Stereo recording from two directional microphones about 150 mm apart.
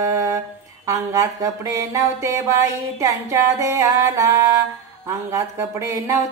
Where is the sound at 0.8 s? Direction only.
20° right (ahead or behind).